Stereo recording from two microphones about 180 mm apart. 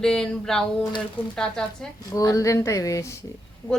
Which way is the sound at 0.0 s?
5° left (ahead or behind).